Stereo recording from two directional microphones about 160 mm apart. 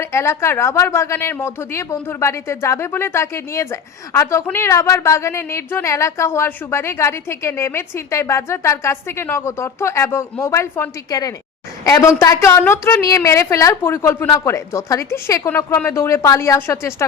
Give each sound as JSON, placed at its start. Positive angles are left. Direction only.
{"t": 0.0, "sound": "a woman's voice", "side_deg": 15}